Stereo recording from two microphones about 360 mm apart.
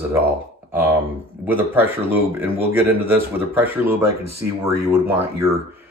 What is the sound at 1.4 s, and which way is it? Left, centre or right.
A man's voice, centre.